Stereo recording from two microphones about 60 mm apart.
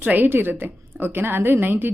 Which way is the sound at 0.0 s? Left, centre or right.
Right.